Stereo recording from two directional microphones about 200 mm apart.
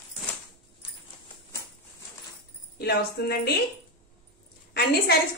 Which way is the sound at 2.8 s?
55° left (ahead or behind).